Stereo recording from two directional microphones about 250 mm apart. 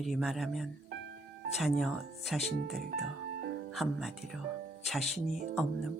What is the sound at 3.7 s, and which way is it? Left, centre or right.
Speech, centre.